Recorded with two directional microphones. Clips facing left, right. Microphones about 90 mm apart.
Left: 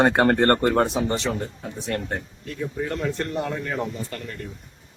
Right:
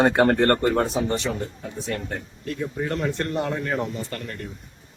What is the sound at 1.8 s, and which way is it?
Speech, 50° left (ahead or behind).